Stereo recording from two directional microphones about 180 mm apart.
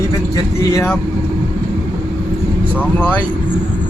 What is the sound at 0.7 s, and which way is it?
Speech, 15° left (ahead or behind).